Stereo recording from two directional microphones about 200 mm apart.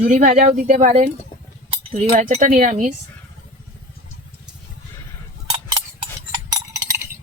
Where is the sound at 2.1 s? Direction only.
35° right (ahead or behind).